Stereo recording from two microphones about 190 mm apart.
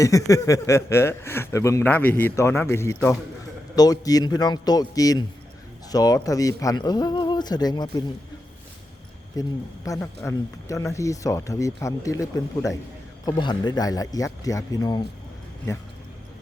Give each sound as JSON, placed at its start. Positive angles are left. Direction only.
{"t": 0.0, "sound": "a man's voice", "side_deg": 15}
{"t": 9.3, "sound": "a man's voice", "side_deg": 20}